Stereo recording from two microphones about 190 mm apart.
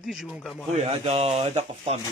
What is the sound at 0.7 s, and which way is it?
Speech, 35° right (ahead or behind).